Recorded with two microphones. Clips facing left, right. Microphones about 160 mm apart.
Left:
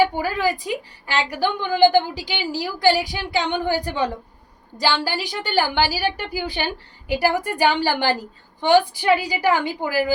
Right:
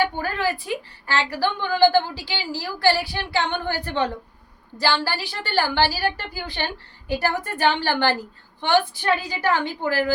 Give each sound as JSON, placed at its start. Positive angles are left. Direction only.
{"t": 0.0, "sound": "a woman's voice", "side_deg": 10}